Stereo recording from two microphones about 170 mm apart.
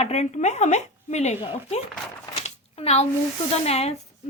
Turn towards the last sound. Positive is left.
turn(degrees=40)  # may be behind; listen again after turning